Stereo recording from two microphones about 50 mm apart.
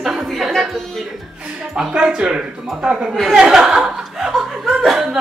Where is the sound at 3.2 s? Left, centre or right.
Centre.